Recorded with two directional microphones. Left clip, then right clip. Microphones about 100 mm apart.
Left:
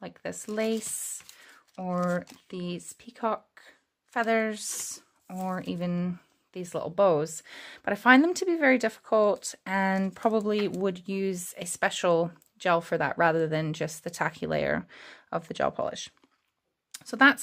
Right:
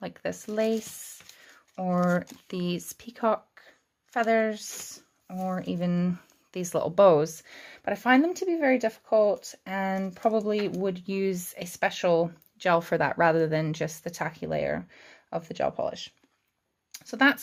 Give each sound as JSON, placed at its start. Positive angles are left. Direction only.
{"t": 0.0, "sound": "a sound", "side_deg": 0}
{"t": 0.3, "sound": "speech", "side_deg": 20}
{"t": 0.9, "sound": "a sound", "side_deg": 30}
{"t": 1.8, "sound": "speech", "side_deg": 5}
{"t": 2.4, "sound": "speech", "side_deg": -10}
{"t": 3.5, "sound": "a sound", "side_deg": 20}
{"t": 4.4, "sound": "speech", "side_deg": 25}
{"t": 5.6, "sound": "speech", "side_deg": 15}
{"t": 6.5, "sound": "speech", "side_deg": -10}
{"t": 7.4, "sound": "speech", "side_deg": 25}
{"t": 8.2, "sound": "speech", "side_deg": 50}
{"t": 11.1, "sound": "speech", "side_deg": 20}
{"t": 12.7, "sound": "speech", "side_deg": 10}
{"t": 14.2, "sound": "speech", "side_deg": 50}